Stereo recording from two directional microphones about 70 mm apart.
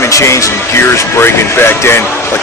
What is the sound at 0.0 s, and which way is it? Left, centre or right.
Speech, left.